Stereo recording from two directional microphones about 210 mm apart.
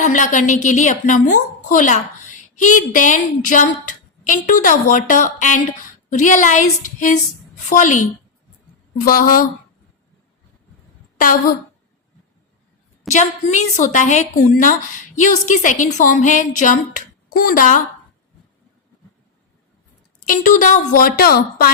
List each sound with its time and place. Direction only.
0.0 s a woman's voice: 40° left (ahead or behind)
7.7 s a woman's voice: 35° left (ahead or behind)
9.0 s a woman's voice: 40° left (ahead or behind)
11.2 s a woman's voice: 40° left (ahead or behind)
13.1 s a woman's voice: 35° left (ahead or behind)
20.2 s a woman's voice: 40° left (ahead or behind)